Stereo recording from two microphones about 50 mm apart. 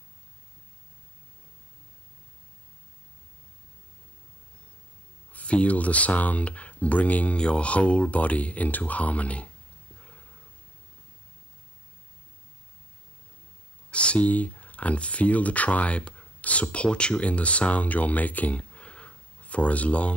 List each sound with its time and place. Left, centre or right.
5.3 s speech: left
9.9 s a sound: left
13.8 s speech: left